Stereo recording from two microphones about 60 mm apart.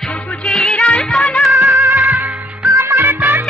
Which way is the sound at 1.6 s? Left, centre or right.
Right.